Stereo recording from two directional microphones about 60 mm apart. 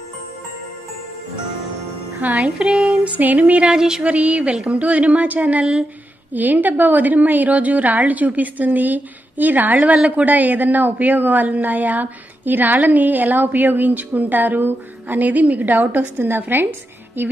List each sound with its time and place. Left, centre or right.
2.1 s a woman's voice: right
3.6 s a sound: centre
4.0 s a woman's voice: right